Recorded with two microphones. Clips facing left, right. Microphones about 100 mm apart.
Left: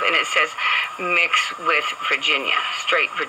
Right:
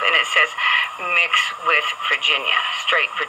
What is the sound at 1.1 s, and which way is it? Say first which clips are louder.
Speech: right 1 dB; 40° right (ahead or behind).